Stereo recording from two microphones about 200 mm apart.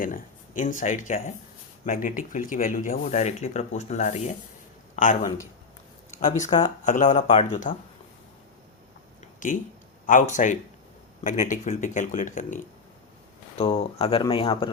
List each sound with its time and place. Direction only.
0.0 s speech: 40° left (ahead or behind)
9.4 s speech: 40° left (ahead or behind)
13.6 s speech: 30° left (ahead or behind)